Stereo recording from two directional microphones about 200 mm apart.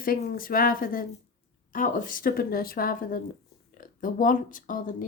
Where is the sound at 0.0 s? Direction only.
45° left (ahead or behind).